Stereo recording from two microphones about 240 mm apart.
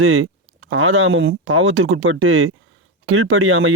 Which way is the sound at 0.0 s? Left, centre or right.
Right.